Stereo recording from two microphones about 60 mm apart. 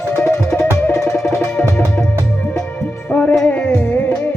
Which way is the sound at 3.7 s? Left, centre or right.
Left.